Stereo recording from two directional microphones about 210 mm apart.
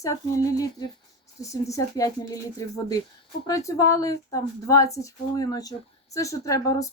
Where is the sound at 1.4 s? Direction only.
15° left (ahead or behind).